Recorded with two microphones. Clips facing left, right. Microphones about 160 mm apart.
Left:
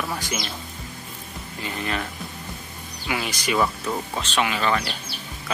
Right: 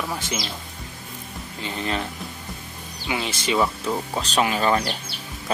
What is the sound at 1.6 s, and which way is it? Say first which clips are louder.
Speech: right 1 dB; 30° right (ahead or behind).